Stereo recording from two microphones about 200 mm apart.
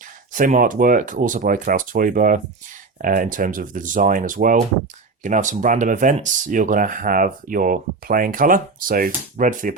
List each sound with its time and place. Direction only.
0.3 s speech: 40° right (ahead or behind)